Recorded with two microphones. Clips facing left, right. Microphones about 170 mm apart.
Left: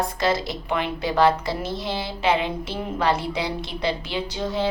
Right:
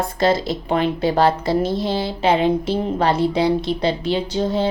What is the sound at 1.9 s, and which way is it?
Speech, 35° right (ahead or behind).